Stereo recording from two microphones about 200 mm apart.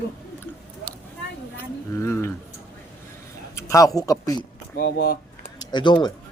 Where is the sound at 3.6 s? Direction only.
15° left (ahead or behind).